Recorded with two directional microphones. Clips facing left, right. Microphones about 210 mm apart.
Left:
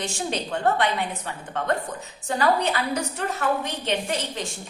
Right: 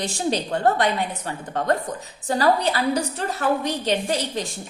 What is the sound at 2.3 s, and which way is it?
A woman's voice, 35° right (ahead or behind).